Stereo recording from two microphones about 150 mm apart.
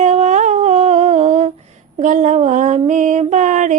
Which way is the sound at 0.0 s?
50° right (ahead or behind).